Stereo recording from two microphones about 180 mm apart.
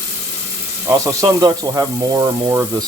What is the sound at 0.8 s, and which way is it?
Speech, 15° right (ahead or behind).